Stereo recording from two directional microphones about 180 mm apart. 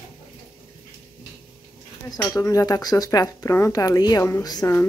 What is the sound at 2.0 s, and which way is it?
Speech, 20° left (ahead or behind).